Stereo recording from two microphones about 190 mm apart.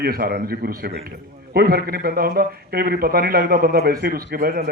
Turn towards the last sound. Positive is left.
turn(degrees=-50)  # may be behind; listen again after turning